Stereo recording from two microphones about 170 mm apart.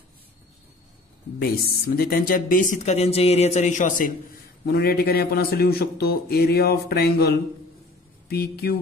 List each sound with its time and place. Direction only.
1.4 s speech: 65° left (ahead or behind); by 4.1 s 45° left (ahead or behind)
4.6 s a man's voice: 65° left (ahead or behind)